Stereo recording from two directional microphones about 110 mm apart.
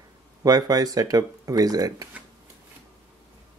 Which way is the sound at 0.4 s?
35° right (ahead or behind).